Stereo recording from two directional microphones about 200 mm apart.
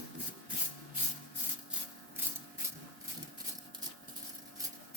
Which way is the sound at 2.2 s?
10° right (ahead or behind).